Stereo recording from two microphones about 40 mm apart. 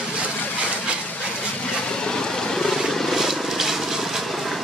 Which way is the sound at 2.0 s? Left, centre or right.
Centre.